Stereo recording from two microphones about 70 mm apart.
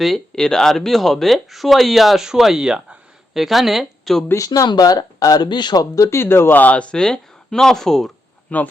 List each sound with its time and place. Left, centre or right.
0.0 s speech: centre
4.4 s speech: left
6.1 s speech: left; by 8.1 s centre
8.5 s speech: left